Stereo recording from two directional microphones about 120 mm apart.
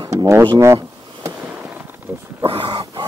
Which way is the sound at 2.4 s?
50° right (ahead or behind).